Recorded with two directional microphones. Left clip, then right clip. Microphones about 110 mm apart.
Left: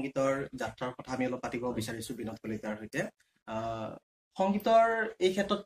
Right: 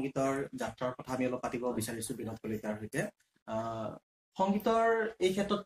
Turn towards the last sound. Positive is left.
turn(degrees=-5)  # may be behind; listen again after turning